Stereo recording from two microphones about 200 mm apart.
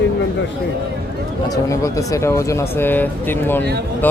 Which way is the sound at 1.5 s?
15° left (ahead or behind).